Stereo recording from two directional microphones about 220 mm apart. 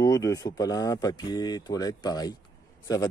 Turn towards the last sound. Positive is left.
turn(degrees=15)  # may be behind; listen again after turning